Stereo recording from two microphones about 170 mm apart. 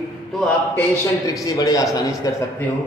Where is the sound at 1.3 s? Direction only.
20° left (ahead or behind).